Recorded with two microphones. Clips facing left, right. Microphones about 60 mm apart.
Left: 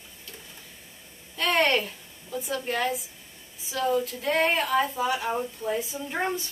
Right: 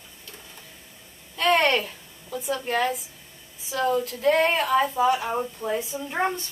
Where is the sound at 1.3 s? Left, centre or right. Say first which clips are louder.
Right 3 dB; centre.